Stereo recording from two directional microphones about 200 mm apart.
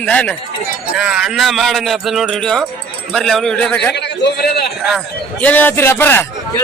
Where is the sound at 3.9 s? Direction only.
55° left (ahead or behind).